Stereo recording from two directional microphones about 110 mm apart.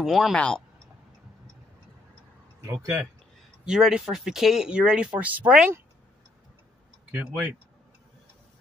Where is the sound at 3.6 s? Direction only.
5° right (ahead or behind).